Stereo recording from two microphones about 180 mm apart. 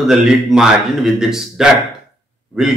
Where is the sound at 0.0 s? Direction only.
Centre (ahead or behind).